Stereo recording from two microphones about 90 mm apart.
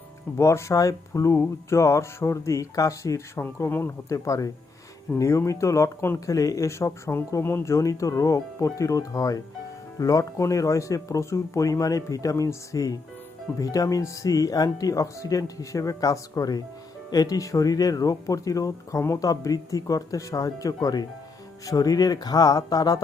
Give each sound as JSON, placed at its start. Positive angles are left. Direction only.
{"t": 0.3, "sound": "speech", "side_deg": 35}